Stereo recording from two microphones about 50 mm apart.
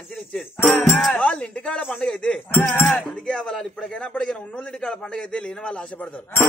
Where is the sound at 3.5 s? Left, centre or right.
Centre.